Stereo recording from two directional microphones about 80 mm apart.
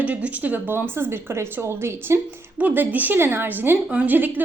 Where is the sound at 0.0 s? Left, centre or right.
Centre.